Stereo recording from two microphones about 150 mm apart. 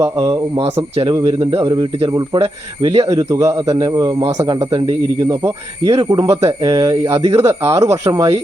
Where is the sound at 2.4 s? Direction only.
40° right (ahead or behind).